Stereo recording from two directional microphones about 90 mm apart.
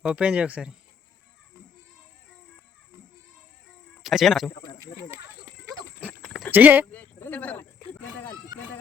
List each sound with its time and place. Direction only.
0.1 s speech: 10° right (ahead or behind)
4.0 s speech: 5° right (ahead or behind)
6.5 s speech: 20° right (ahead or behind)
6.9 s speech: 15° left (ahead or behind)